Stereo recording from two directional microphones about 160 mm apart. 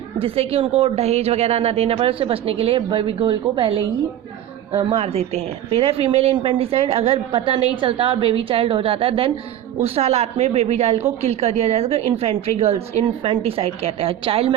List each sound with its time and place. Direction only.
0.2 s a woman's voice: 35° right (ahead or behind)